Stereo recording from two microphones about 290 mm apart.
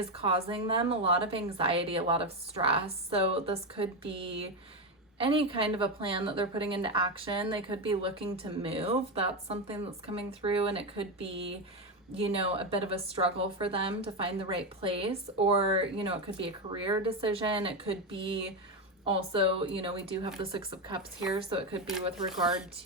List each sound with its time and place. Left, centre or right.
0.2 s a woman's voice: centre
21.8 s speech: centre